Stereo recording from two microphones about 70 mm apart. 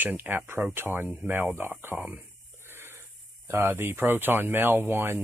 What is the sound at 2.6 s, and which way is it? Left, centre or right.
Wheeze, right.